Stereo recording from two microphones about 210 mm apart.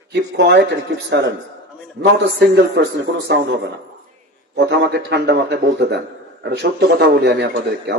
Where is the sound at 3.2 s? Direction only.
55° right (ahead or behind).